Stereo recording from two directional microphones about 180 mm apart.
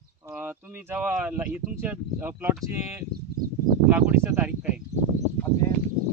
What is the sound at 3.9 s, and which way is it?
Speech, 10° right (ahead or behind).